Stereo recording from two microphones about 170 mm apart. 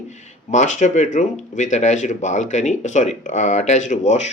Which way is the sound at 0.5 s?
45° left (ahead or behind).